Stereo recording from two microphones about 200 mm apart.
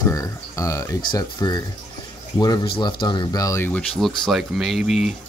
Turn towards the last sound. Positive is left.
turn(degrees=0)  # may be behind; listen again after turning